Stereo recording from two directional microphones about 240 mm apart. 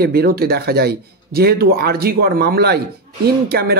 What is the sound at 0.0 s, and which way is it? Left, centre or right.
A man's voice, right.